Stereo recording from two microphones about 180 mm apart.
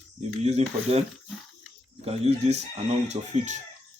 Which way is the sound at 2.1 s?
35° right (ahead or behind).